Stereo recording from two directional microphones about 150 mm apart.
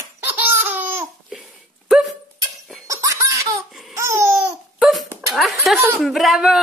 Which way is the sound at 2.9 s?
20° right (ahead or behind).